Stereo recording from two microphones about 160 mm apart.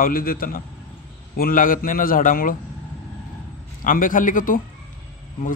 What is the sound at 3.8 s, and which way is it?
Speech, 60° left (ahead or behind).